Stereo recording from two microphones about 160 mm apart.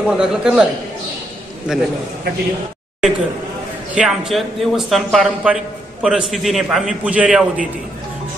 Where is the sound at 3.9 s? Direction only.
5° right (ahead or behind).